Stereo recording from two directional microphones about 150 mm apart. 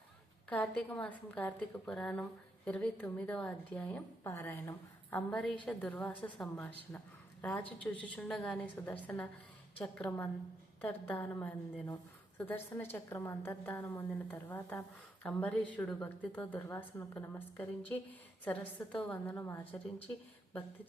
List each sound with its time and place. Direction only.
0.5 s a woman's voice: 5° left (ahead or behind)
5.1 s a woman's voice: 5° left (ahead or behind)